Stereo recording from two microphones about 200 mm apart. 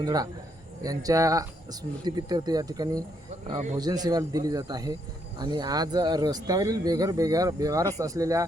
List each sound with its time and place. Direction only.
0.0 s speech: 20° right (ahead or behind)